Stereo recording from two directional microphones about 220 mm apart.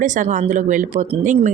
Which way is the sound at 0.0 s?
35° right (ahead or behind).